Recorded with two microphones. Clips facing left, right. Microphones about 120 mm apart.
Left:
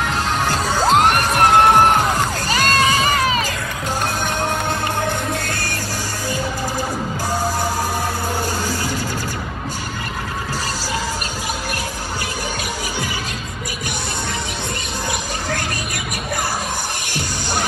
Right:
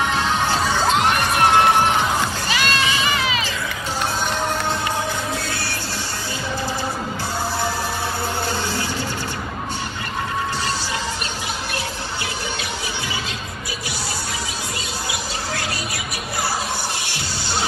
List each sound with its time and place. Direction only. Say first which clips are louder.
0.5 s crowd: left 2 dB; 45° left (ahead or behind)